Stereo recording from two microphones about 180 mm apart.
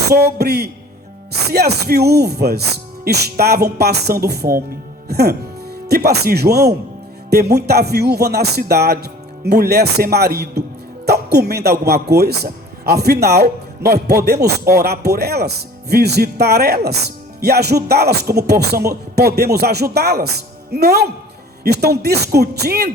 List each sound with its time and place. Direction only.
0.0 s a man's voice: 65° right (ahead or behind)